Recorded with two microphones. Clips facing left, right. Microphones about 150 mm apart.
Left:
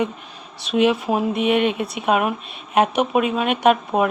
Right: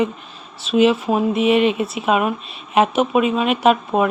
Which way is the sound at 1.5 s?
55° left (ahead or behind).